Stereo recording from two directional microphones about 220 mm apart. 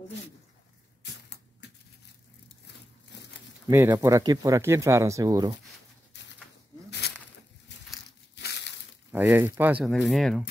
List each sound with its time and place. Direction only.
1.0 s a sound: 50° left (ahead or behind)
3.6 s speech: 15° right (ahead or behind)
6.1 s bird: 50° left (ahead or behind)
7.7 s crumpling: 50° left (ahead or behind)
8.4 s crushing: 50° left (ahead or behind)
9.1 s speech: 10° right (ahead or behind)